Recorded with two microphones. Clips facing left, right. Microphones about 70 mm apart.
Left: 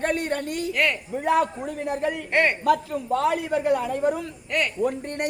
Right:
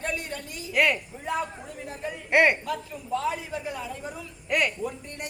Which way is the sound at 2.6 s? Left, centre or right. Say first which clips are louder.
Left 11 dB; left.